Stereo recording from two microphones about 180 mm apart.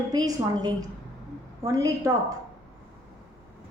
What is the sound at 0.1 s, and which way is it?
A woman's voice, 20° right (ahead or behind).